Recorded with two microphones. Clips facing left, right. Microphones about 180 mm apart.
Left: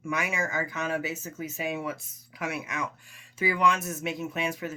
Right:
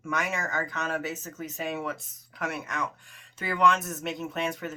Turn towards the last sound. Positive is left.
turn(degrees=0)  # may be behind; listen again after turning